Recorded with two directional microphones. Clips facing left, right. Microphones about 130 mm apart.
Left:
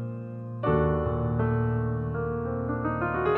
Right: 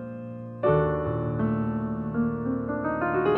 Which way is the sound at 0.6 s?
Centre (ahead or behind).